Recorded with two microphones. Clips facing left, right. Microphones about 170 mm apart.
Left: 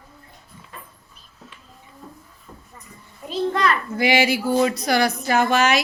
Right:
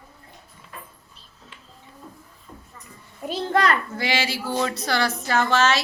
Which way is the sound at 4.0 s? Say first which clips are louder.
Left 7 dB; 15° left (ahead or behind).